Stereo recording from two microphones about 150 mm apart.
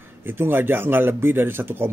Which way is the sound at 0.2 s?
15° right (ahead or behind).